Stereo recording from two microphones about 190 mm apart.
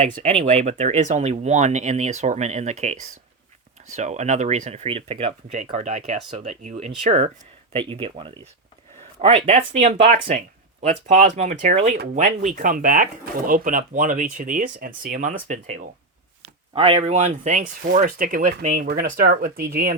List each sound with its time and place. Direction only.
0.0 s speech: 35° right (ahead or behind); by 20.0 s 50° right (ahead or behind)